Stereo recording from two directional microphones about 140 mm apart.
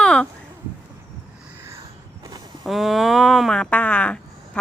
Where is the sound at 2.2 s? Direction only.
30° right (ahead or behind).